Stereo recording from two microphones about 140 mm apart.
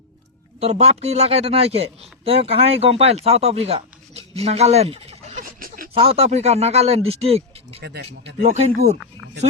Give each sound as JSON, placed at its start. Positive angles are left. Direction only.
{"t": 0.6, "sound": "a man's voice", "side_deg": -50}
{"t": 5.5, "sound": "a sound", "side_deg": -90}
{"t": 5.9, "sound": "a man's voice", "side_deg": -45}